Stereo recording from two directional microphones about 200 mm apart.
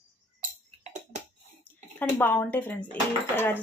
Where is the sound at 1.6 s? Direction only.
10° left (ahead or behind).